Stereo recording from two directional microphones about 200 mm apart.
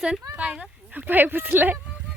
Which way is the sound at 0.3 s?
5° right (ahead or behind).